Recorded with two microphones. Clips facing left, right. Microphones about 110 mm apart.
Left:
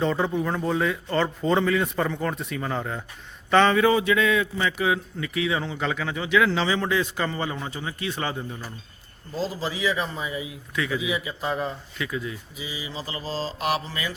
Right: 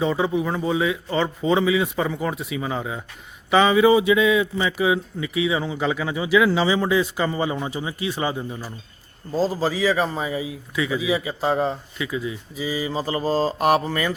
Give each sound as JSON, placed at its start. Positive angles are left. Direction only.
{"t": 0.0, "sound": "speech", "side_deg": -5}
{"t": 9.3, "sound": "a man's voice", "side_deg": -40}
{"t": 11.9, "sound": "speech", "side_deg": -5}
{"t": 12.5, "sound": "speech", "side_deg": -40}